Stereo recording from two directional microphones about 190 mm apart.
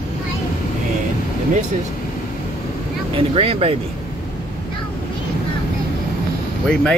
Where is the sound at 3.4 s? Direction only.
30° right (ahead or behind).